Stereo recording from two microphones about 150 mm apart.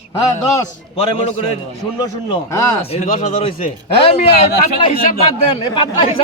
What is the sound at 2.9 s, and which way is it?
Speech, 55° left (ahead or behind).